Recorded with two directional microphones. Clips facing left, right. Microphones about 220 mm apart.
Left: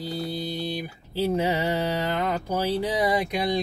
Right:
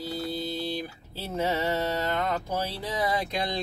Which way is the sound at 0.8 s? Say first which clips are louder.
Left 9 dB; 15° left (ahead or behind).